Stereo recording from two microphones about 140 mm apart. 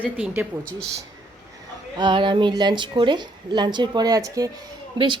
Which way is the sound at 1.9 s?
35° right (ahead or behind).